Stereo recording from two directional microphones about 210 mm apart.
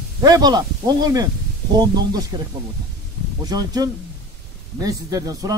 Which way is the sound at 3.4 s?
20° right (ahead or behind).